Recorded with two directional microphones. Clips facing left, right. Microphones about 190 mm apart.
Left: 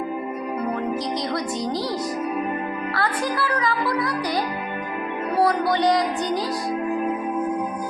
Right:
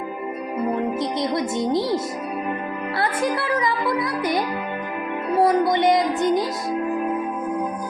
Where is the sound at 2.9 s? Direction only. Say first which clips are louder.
Right 3 dB; 25° right (ahead or behind).